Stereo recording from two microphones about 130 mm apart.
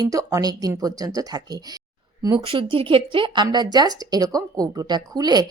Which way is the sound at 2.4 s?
40° right (ahead or behind).